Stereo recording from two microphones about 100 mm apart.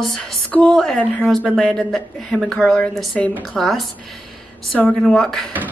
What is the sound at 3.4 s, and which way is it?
Speech, centre (ahead or behind).